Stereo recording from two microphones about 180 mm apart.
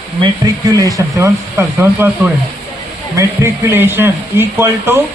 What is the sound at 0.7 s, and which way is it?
Speech, 20° right (ahead or behind).